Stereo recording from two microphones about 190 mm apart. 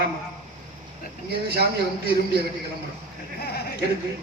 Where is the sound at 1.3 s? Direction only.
55° right (ahead or behind).